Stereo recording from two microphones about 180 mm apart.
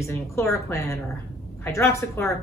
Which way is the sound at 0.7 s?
15° left (ahead or behind).